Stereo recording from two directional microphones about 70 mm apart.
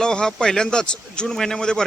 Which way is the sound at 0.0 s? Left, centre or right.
Centre.